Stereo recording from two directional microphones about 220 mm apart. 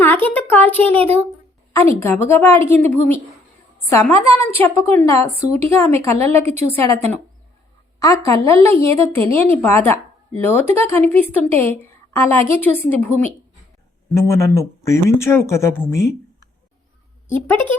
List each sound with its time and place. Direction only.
0.0 s a child's voice: 10° left (ahead or behind)
0.9 s speech: 25° right (ahead or behind)
1.7 s a woman's voice: 10° left (ahead or behind)
14.3 s a woman's voice: 15° left (ahead or behind)
15.9 s a sound: 15° left (ahead or behind)